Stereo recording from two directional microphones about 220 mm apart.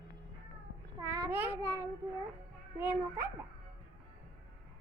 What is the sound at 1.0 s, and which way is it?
Child singing, 15° right (ahead or behind).